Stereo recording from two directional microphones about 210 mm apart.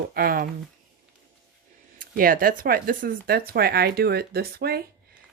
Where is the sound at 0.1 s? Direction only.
45° right (ahead or behind).